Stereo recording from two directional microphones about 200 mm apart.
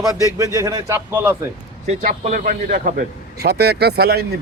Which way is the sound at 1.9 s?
35° right (ahead or behind).